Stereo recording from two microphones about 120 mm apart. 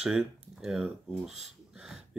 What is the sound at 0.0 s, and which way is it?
Speech, 5° right (ahead or behind).